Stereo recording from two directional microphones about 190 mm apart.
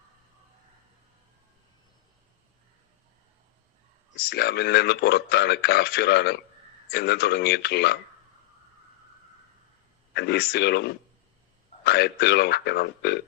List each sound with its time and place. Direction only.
4.2 s speech: 55° left (ahead or behind)
10.2 s speech: 60° left (ahead or behind)